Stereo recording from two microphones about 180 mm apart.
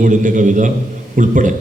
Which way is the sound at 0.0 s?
45° right (ahead or behind).